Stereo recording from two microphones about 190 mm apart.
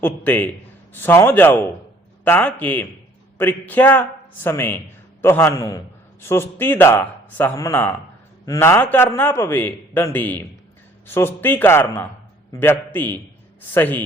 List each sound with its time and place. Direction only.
0.0 s a man's voice: 10° left (ahead or behind)